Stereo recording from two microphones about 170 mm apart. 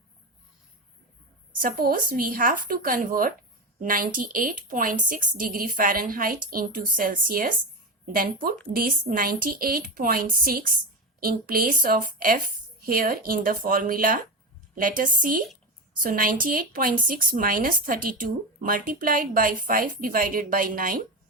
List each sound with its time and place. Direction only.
1.5 s a woman's voice: 60° right (ahead or behind)